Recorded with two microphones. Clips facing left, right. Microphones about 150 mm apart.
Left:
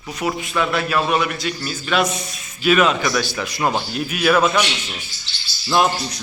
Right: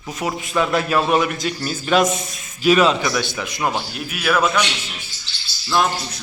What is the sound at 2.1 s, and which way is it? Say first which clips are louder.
Speech: right 3 dB; 20° right (ahead or behind).